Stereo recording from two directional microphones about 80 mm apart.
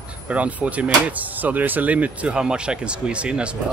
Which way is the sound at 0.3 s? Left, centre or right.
Centre.